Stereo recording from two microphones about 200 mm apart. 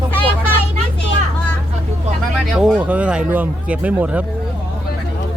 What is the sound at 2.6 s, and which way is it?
Speech, 5° right (ahead or behind).